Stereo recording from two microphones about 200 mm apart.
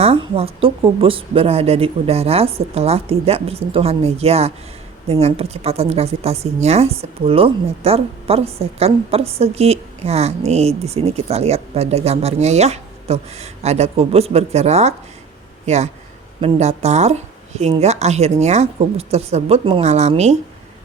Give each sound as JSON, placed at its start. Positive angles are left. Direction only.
{"t": 0.0, "sound": "a woman's voice", "side_deg": -30}